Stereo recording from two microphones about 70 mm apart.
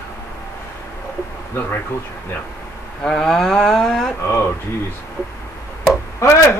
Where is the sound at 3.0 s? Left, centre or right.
Centre.